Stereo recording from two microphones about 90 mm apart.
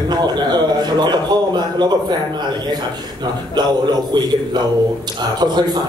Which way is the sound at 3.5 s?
55° right (ahead or behind).